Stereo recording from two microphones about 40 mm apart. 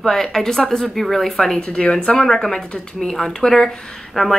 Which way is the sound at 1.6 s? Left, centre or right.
Left.